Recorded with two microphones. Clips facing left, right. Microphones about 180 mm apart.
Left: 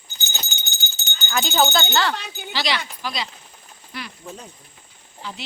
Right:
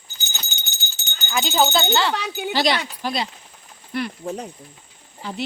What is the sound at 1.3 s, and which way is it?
Speech, 15° right (ahead or behind).